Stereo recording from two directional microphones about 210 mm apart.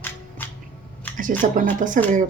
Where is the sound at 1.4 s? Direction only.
40° right (ahead or behind).